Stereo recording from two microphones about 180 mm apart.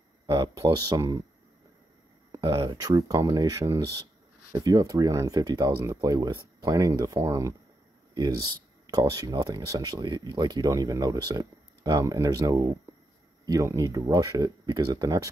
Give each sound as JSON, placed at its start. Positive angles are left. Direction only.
{"t": 0.3, "sound": "speech", "side_deg": -25}
{"t": 2.3, "sound": "speech", "side_deg": -25}